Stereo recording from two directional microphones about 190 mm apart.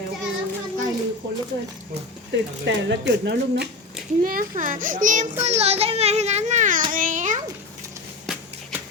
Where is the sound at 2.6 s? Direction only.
65° right (ahead or behind).